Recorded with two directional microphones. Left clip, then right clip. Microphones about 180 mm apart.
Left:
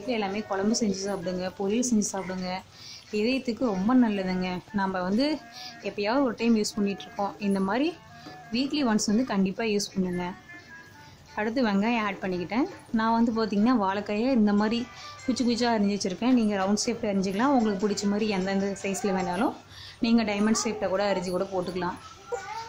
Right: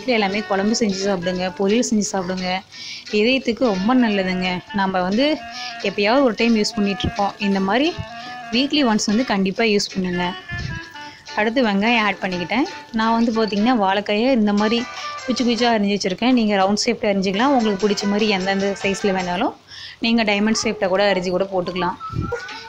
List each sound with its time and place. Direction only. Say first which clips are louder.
0.0 s speech: right 10 dB; 15° right (ahead or behind)
11.3 s speech: right 8 dB; 15° right (ahead or behind)